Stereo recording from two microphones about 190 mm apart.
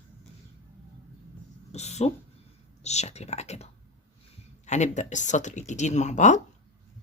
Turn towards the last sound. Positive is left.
turn(degrees=40)  # may be behind; listen again after turning